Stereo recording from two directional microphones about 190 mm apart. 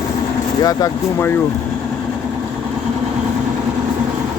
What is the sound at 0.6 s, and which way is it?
Speech, 15° left (ahead or behind).